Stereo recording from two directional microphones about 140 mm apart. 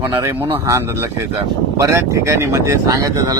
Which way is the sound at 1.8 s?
20° right (ahead or behind).